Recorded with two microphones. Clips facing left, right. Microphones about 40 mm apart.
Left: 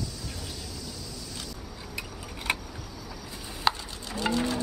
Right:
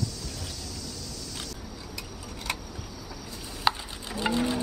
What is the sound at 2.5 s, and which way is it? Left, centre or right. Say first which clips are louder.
Vehicle: left 4 dB; left.